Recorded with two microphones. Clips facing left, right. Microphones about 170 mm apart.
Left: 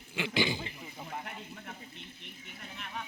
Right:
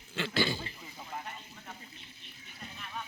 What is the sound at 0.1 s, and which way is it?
Speech, 15° left (ahead or behind).